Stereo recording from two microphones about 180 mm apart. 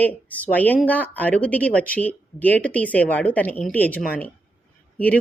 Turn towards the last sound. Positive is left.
turn(degrees=10)  # may be behind; listen again after turning